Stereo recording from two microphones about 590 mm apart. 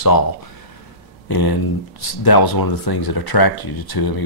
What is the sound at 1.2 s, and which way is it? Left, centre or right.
Speech, left.